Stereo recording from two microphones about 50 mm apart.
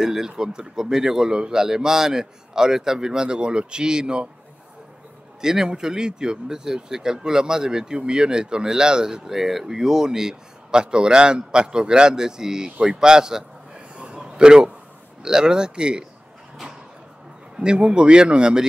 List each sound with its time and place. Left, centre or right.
0.0 s speech: centre
5.4 s speech: centre
13.9 s a sound: centre
15.2 s speech: centre
17.6 s speech: centre